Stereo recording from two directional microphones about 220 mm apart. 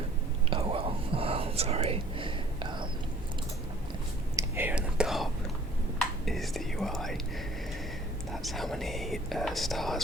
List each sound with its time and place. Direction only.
0.5 s whispering: 25° right (ahead or behind)
4.4 s whispering: 10° right (ahead or behind)
8.3 s whispering: centre (ahead or behind)